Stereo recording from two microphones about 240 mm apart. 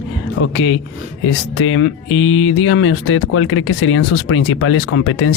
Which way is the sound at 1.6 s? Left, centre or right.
Left.